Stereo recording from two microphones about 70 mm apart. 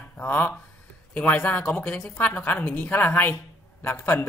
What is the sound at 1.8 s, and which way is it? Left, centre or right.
Speech, centre.